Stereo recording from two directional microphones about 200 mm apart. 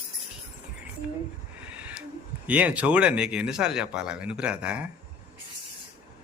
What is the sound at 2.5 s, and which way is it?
Speech, 5° right (ahead or behind).